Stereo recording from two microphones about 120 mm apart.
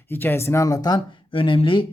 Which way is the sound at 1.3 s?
45° left (ahead or behind).